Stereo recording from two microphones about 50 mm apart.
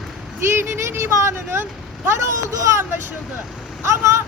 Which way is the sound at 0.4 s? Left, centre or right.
Right.